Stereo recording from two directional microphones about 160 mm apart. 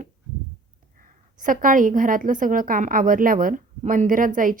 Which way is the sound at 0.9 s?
55° right (ahead or behind).